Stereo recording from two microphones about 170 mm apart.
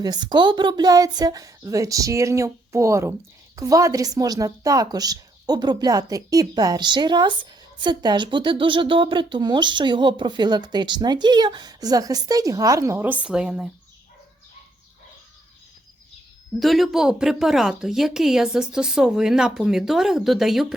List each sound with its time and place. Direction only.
0.0 s speech: 25° right (ahead or behind); by 13.7 s 5° right (ahead or behind)
16.6 s speech: centre (ahead or behind)